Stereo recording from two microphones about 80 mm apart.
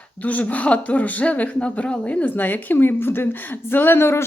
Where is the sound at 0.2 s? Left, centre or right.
Centre.